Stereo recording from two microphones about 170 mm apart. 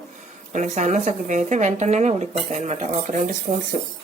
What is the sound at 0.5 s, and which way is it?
Speech, 45° right (ahead or behind).